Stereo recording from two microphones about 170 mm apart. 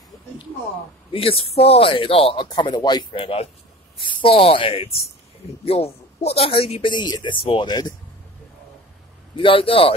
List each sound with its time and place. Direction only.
1.1 s speech: 35° left (ahead or behind)
2.4 s speech: 25° left (ahead or behind)
9.3 s speech: 30° left (ahead or behind)